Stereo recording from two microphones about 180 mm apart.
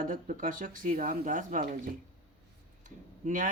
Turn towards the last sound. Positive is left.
turn(degrees=-45)  # may be behind; listen again after turning